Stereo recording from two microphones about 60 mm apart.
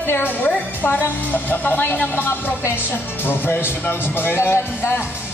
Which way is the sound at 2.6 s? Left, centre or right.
Left.